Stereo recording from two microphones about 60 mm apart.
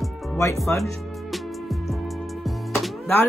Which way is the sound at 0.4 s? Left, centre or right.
Left.